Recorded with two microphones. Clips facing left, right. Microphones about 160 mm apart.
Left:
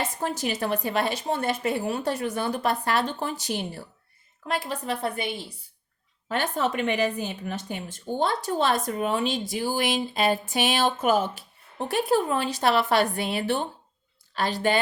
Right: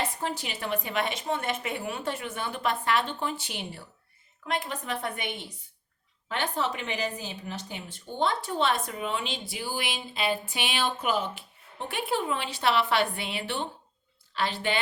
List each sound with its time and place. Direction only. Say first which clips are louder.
0.2 s a woman's voice: left 5 dB; 45° left (ahead or behind)
6.2 s a woman's voice: left 4 dB; 40° left (ahead or behind)